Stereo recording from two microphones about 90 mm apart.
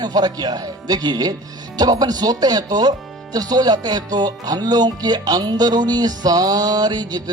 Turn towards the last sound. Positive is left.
turn(degrees=-50)  # may be behind; listen again after turning